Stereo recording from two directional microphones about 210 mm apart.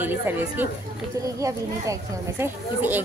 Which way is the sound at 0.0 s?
10° right (ahead or behind).